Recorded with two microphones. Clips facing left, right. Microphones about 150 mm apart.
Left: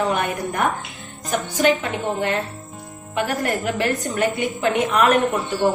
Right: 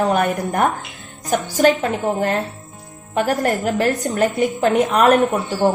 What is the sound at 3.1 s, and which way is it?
A woman's voice, 45° right (ahead or behind).